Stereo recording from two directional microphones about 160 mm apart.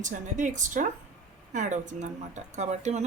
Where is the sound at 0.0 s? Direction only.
50° right (ahead or behind).